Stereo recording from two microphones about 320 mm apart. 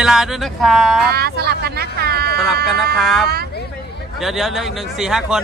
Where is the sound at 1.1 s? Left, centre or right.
Right.